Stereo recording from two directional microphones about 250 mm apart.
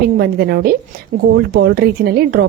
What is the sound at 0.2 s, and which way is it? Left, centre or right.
A woman's voice, right.